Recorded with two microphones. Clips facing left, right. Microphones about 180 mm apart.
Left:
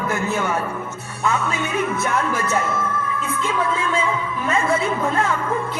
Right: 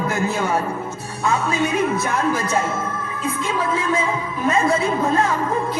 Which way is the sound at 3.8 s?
35° right (ahead or behind).